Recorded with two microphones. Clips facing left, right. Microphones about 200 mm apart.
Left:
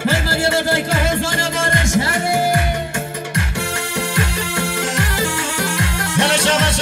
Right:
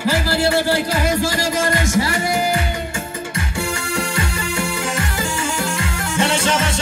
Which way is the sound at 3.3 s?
65° left (ahead or behind).